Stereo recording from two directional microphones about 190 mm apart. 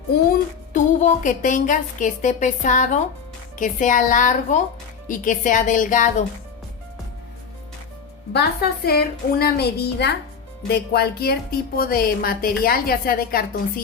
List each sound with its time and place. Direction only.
0.7 s a woman's voice: 40° left (ahead or behind)
8.3 s a woman's voice: 55° left (ahead or behind)